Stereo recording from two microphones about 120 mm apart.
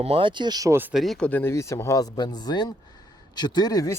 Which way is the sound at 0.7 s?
15° right (ahead or behind).